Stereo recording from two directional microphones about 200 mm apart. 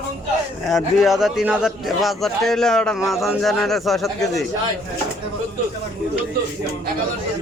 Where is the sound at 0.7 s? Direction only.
Centre (ahead or behind).